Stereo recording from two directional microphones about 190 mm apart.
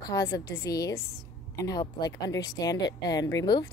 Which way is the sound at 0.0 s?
20° left (ahead or behind).